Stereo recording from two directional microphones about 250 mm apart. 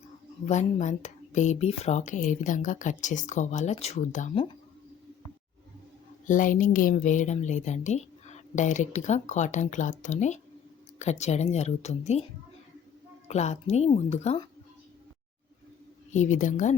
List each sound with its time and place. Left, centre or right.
0.4 s speech: left
6.2 s speech: left
13.2 s speech: left
16.1 s speech: left